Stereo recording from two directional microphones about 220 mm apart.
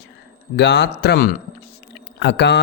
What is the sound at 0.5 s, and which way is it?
Speech, 50° left (ahead or behind).